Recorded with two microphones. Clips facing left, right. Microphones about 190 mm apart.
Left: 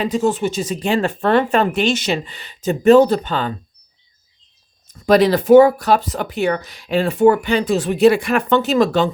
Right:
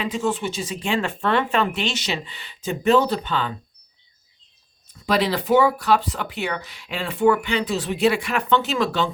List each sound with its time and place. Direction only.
0.0 s speech: 40° left (ahead or behind)
5.0 s speech: 45° left (ahead or behind)